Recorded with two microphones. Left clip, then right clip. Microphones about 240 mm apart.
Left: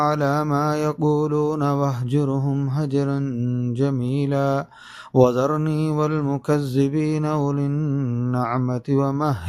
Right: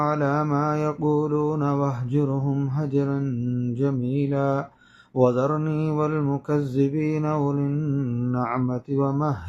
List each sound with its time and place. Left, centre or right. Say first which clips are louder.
0.0 s mantra: left 3 dB; left